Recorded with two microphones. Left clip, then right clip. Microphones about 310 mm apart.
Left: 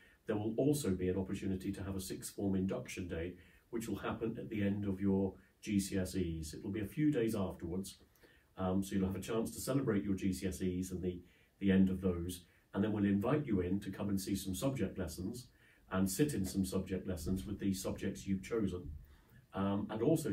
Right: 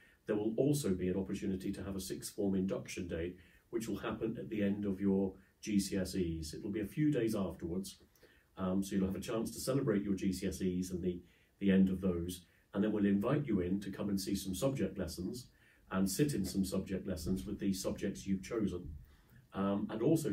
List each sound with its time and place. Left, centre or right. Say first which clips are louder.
0.3 s speech: right 1 dB; centre